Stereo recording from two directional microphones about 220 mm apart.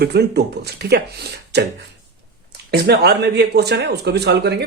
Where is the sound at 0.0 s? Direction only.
50° right (ahead or behind).